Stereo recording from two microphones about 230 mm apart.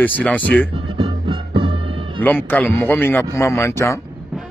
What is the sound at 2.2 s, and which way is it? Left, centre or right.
Speech, centre.